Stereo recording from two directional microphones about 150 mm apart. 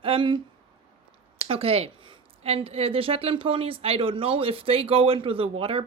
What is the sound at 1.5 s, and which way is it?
A woman's voice, 40° right (ahead or behind).